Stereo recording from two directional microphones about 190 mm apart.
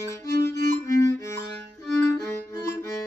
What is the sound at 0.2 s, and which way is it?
Music, 15° left (ahead or behind).